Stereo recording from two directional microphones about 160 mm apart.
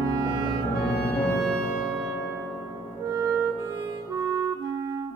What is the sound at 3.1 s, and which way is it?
Music, 20° right (ahead or behind).